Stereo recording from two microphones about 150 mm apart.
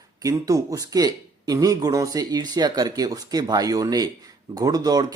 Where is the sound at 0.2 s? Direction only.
25° right (ahead or behind).